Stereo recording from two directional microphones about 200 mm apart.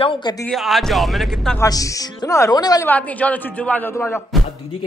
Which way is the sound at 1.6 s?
15° left (ahead or behind).